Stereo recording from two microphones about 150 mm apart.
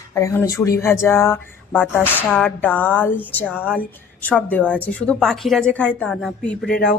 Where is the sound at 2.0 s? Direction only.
10° right (ahead or behind).